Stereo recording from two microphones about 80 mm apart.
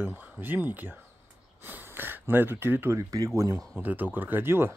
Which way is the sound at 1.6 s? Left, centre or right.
Right.